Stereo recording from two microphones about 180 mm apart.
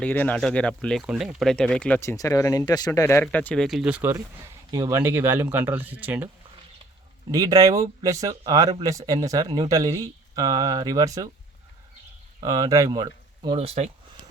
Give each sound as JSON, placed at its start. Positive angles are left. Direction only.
{"t": 0.0, "sound": "speech", "side_deg": 10}
{"t": 7.3, "sound": "speech", "side_deg": -20}
{"t": 12.4, "sound": "speech", "side_deg": -20}